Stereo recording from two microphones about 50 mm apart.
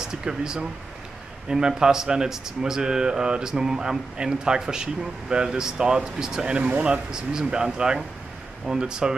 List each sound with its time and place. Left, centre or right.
0.0 s speech: centre
6.6 s speech: right
6.9 s speech: centre